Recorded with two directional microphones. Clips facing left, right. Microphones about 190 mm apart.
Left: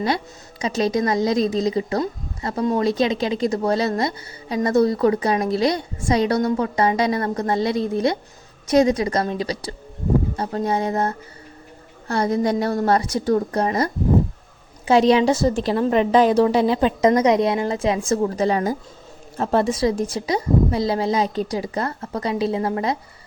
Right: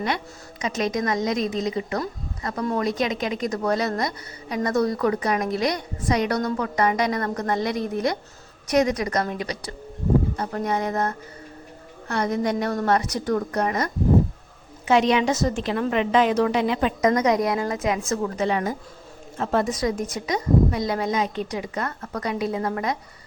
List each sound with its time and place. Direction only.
0.6 s a woman's voice: 30° left (ahead or behind)